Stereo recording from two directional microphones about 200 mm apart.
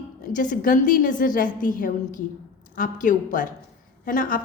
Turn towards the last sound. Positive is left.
turn(degrees=45)  # may be behind; listen again after turning